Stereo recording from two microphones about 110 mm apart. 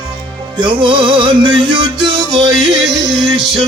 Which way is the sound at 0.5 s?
45° right (ahead or behind).